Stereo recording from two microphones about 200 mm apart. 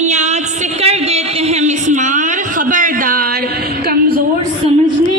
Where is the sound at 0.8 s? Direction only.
30° right (ahead or behind).